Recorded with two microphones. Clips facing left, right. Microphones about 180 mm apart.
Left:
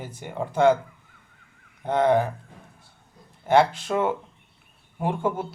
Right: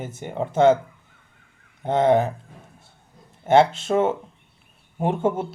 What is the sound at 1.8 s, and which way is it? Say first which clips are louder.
Speech: right 2 dB; 25° right (ahead or behind).